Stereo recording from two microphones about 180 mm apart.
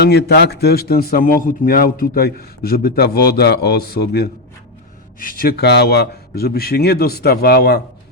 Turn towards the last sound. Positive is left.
turn(degrees=60)  # may be behind; listen again after turning